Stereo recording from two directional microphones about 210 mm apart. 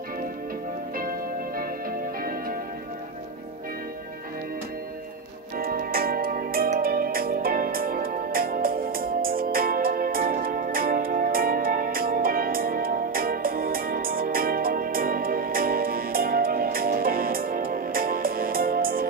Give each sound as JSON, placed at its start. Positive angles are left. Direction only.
{"t": 5.6, "sound": "music", "side_deg": -45}